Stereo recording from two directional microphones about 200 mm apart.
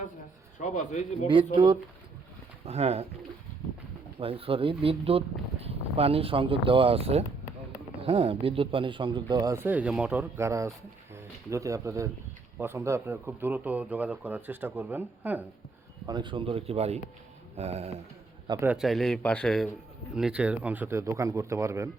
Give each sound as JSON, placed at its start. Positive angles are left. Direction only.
{"t": 0.6, "sound": "speech", "side_deg": 40}
{"t": 1.5, "sound": "speech", "side_deg": -25}
{"t": 4.2, "sound": "speech", "side_deg": -30}
{"t": 16.0, "sound": "speech", "side_deg": -20}
{"t": 18.4, "sound": "a man's voice", "side_deg": -20}
{"t": 18.7, "sound": "speech", "side_deg": 0}